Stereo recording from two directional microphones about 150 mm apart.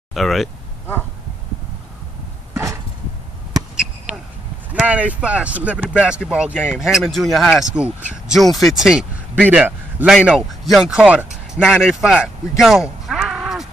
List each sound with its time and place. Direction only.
0.1 s speech: centre (ahead or behind)
2.5 s a sound: 20° right (ahead or behind)
4.8 s speech: 10° right (ahead or behind)